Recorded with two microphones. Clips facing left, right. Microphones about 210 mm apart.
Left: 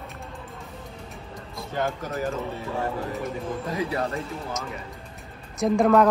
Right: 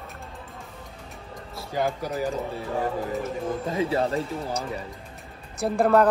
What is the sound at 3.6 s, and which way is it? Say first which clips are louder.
Speech: right 3 dB; 25° right (ahead or behind).